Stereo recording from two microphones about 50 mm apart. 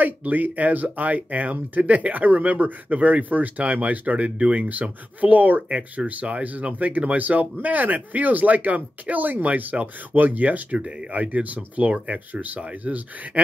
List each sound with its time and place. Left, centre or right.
0.0 s speech: right